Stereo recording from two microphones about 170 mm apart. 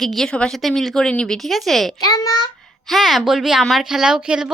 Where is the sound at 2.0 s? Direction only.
20° left (ahead or behind).